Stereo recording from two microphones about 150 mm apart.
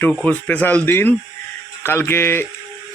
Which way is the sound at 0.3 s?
10° left (ahead or behind).